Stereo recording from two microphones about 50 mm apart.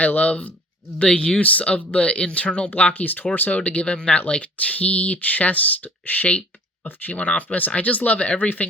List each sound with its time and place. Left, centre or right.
0.0 s speech: left